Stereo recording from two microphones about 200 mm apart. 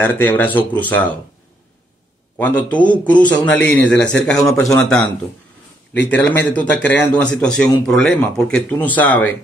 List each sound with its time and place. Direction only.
0.0 s a man's voice: 10° left (ahead or behind)
2.3 s a man's voice: 10° left (ahead or behind)
4.7 s a man's voice: 5° left (ahead or behind)